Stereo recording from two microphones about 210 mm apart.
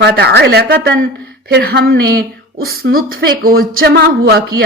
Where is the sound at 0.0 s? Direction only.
50° right (ahead or behind).